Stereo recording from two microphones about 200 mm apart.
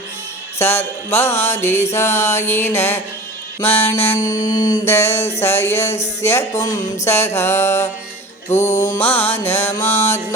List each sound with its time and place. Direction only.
0.6 s mantra: 10° left (ahead or behind)
8.5 s music: 35° left (ahead or behind)
9.0 s mantra: 10° left (ahead or behind)